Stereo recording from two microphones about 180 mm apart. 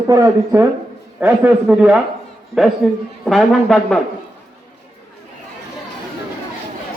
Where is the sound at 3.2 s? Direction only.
Centre (ahead or behind).